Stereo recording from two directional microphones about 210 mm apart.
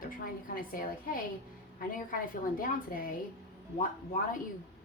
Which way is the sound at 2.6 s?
40° left (ahead or behind).